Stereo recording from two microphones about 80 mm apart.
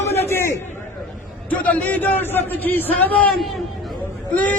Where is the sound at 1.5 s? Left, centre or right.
Left.